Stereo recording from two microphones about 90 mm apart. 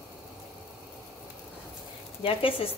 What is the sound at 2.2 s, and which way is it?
Speech, 90° left.